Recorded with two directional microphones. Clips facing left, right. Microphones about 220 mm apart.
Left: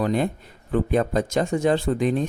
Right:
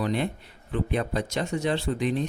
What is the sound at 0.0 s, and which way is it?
Speech, 45° left (ahead or behind).